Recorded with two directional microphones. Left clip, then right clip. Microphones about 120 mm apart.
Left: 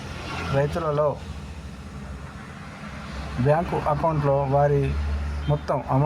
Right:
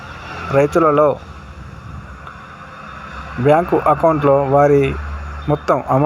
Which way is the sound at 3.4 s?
20° right (ahead or behind).